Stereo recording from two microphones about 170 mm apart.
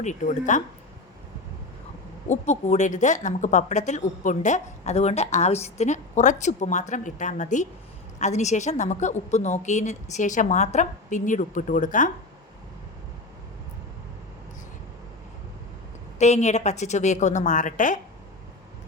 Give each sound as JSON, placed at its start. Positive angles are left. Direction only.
{"t": 0.0, "sound": "speech", "side_deg": 45}
{"t": 2.3, "sound": "speech", "side_deg": 45}
{"t": 16.1, "sound": "speech", "side_deg": 40}